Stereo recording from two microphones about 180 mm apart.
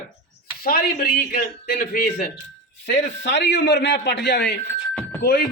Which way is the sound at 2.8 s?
80° left.